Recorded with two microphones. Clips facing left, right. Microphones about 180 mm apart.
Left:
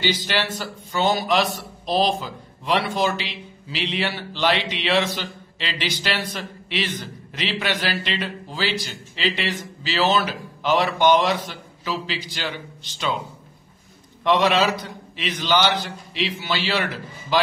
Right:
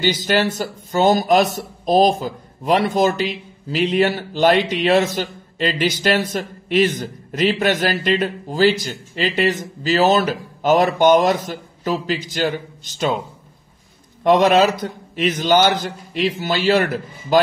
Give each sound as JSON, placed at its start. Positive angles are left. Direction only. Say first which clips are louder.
{"t": 0.0, "sound": "a man's voice", "louder": "right 6 dB", "side_deg": -45}
{"t": 14.2, "sound": "a man's voice", "louder": "right 5 dB", "side_deg": -45}